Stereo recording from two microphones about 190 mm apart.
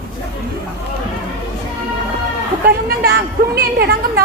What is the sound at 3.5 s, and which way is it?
Speech, 55° right (ahead or behind).